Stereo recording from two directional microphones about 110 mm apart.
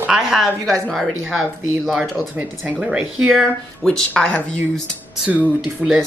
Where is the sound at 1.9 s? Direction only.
5° right (ahead or behind).